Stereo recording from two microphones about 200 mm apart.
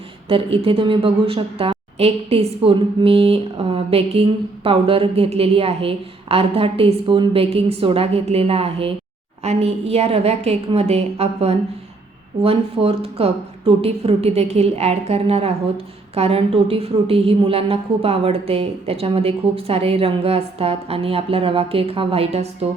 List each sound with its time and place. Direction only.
0.3 s a woman's voice: 25° right (ahead or behind)